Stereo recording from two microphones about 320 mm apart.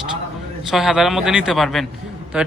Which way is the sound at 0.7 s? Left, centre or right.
Centre.